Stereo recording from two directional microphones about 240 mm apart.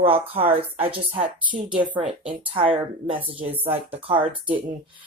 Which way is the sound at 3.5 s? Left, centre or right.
Centre.